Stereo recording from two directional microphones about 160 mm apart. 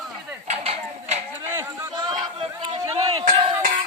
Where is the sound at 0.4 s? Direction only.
40° right (ahead or behind).